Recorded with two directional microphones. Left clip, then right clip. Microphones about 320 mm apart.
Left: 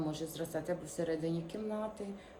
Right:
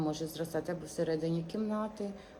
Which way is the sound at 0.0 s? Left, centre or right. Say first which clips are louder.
Right 3 dB; centre.